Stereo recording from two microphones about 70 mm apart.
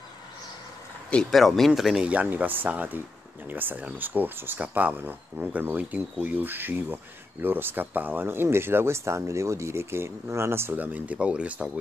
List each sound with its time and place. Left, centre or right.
1.3 s speech: centre
2.0 s speech: right